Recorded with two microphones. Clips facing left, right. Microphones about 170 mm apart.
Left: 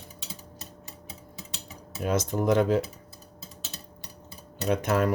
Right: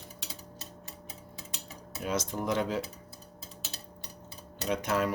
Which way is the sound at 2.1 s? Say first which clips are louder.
Left 7 dB; 50° left (ahead or behind).